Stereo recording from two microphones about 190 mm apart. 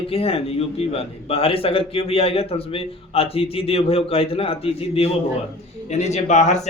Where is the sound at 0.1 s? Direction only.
30° left (ahead or behind).